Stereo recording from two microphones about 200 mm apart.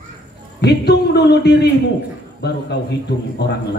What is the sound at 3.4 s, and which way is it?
Speech, 55° left (ahead or behind).